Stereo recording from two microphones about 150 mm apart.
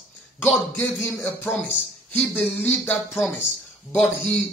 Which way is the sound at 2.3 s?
10° left (ahead or behind).